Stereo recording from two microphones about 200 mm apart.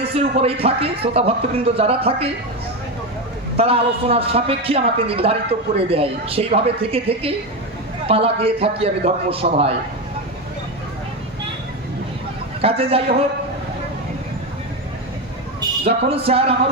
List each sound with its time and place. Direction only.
0.1 s a woman's voice: 30° right (ahead or behind)
3.6 s a woman's voice: 30° right (ahead or behind)
12.6 s a woman's voice: 30° right (ahead or behind)
15.8 s a woman's voice: 30° right (ahead or behind)